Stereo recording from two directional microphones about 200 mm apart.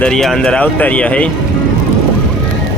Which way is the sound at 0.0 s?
Centre (ahead or behind).